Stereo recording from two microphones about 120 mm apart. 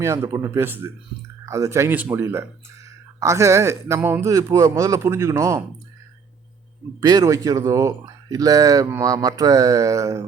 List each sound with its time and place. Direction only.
0.0 s a man's voice: 25° right (ahead or behind)
7.0 s a man's voice: 30° right (ahead or behind)